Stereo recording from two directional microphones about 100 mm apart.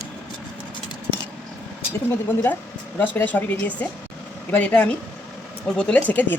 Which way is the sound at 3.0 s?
15° left (ahead or behind).